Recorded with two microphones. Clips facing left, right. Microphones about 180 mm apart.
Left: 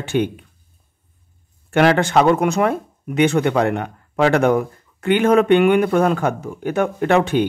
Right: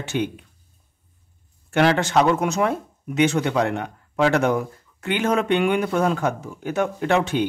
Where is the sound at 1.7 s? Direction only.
55° left (ahead or behind).